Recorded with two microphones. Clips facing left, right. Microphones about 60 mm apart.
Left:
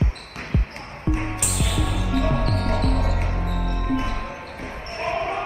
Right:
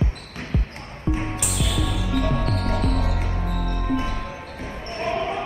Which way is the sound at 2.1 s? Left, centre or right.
Left.